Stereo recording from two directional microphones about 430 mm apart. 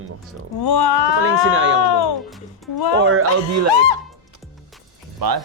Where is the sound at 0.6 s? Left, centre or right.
Left.